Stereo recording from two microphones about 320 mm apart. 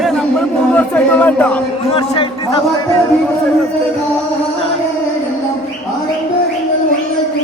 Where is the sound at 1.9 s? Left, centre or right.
Centre.